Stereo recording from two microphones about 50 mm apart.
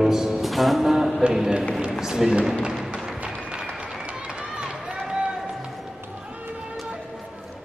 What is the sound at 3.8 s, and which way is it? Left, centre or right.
Run, centre.